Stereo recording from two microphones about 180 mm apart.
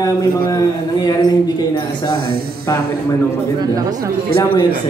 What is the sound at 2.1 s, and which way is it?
Speech, 55° right (ahead or behind).